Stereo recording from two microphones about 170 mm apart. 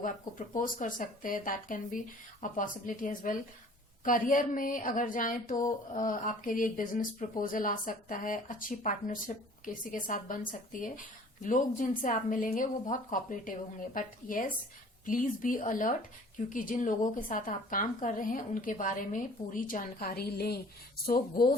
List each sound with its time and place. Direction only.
0.0 s speech: 50° left (ahead or behind); by 20.6 s 70° left (ahead or behind)
21.1 s speech: 55° left (ahead or behind)